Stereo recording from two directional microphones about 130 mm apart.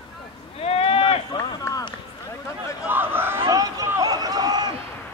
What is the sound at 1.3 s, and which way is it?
Run, 30° left (ahead or behind).